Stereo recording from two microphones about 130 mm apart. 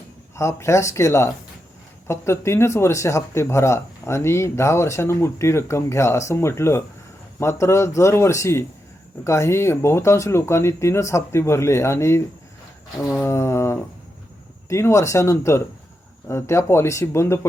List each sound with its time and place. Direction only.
0.3 s speech: 20° left (ahead or behind)